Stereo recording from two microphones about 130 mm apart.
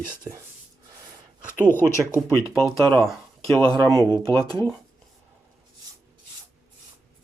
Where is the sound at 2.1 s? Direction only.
25° left (ahead or behind).